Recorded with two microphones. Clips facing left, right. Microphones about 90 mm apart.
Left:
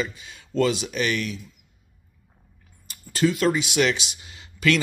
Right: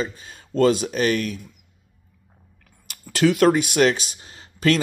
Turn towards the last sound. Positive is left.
turn(degrees=-40)  # may be behind; listen again after turning